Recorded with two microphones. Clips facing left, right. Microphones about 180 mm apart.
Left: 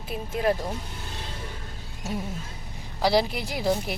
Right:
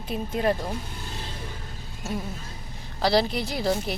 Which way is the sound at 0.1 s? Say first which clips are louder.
Right 1 dB; 5° left (ahead or behind).